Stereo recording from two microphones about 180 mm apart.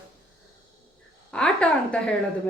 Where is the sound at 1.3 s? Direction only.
5° left (ahead or behind).